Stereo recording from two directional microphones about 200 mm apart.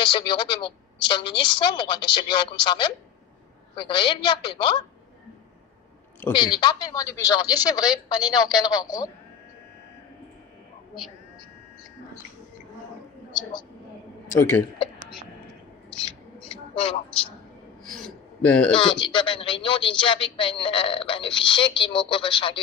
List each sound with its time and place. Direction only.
0.0 s a woman's voice: 20° left (ahead or behind)
6.3 s a woman's voice: 20° left (ahead or behind)
15.0 s whispering: centre (ahead or behind)
15.9 s owl: 5° left (ahead or behind)
16.3 s owl: 30° left (ahead or behind)
17.9 s a sound: 5° left (ahead or behind)
18.7 s a woman's voice: 25° left (ahead or behind)